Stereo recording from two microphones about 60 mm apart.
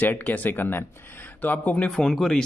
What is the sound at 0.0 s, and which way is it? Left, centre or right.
Speech, left.